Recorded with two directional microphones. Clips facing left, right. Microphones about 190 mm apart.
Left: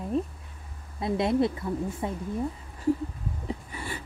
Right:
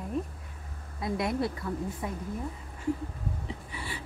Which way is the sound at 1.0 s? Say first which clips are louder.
Left 5 dB; 25° left (ahead or behind).